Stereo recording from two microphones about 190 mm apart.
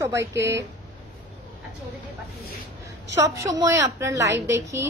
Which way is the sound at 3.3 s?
20° right (ahead or behind).